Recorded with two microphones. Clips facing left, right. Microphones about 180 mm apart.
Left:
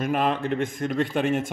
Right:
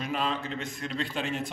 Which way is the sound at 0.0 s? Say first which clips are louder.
Left 7 dB; 55° left (ahead or behind).